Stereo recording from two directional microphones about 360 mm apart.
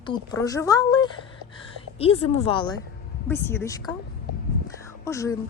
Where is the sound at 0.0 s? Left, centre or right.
Centre.